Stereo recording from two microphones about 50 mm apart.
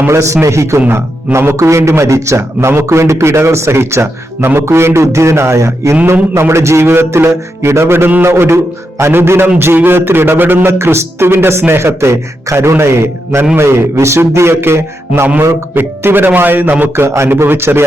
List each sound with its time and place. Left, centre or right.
0.1 s a man's voice: right
0.4 s a man's voice: right
0.9 s a man's voice: right
7.1 s a man's voice: right
10.7 s a man's voice: right
11.8 s a man's voice: right
16.9 s a man's voice: right